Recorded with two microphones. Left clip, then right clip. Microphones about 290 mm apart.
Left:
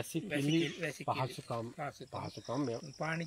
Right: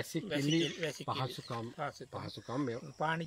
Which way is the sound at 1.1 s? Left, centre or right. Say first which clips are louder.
Left 2 dB; centre.